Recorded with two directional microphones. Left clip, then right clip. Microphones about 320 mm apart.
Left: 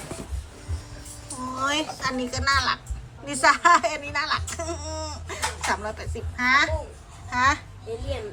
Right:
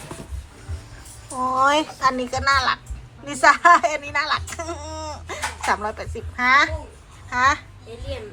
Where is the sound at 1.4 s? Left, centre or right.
Centre.